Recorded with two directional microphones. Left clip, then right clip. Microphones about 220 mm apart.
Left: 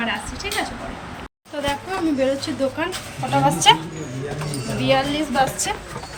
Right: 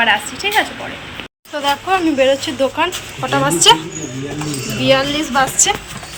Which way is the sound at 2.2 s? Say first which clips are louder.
Right 7 dB; 5° left (ahead or behind).